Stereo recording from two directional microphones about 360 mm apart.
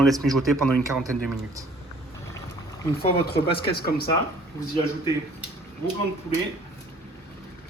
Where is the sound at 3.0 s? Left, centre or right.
Centre.